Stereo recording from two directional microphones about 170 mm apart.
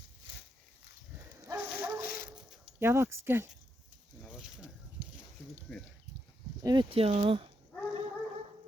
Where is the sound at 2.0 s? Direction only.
60° left (ahead or behind).